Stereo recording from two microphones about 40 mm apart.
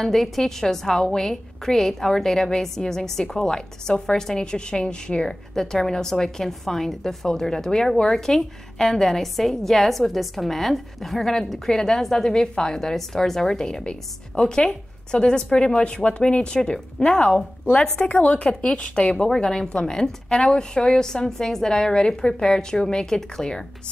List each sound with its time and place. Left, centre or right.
0.0 s a woman's voice: centre
5.5 s a woman's voice: centre
18.0 s a woman's voice: left
19.2 s a woman's voice: centre